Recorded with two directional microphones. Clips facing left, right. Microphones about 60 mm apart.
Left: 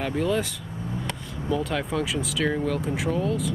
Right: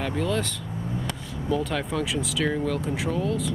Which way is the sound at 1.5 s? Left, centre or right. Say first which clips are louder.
Even; centre.